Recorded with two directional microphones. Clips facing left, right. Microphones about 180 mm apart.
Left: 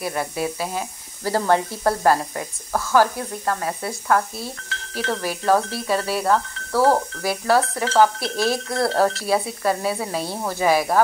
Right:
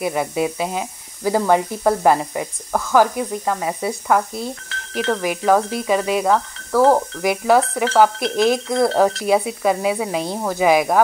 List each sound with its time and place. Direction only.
0.0 s speech: 15° right (ahead or behind)